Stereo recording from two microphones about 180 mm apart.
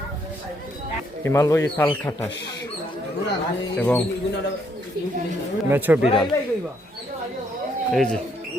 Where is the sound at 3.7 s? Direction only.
10° left (ahead or behind).